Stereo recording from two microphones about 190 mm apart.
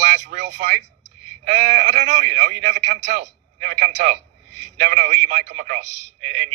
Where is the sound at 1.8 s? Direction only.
55° right (ahead or behind).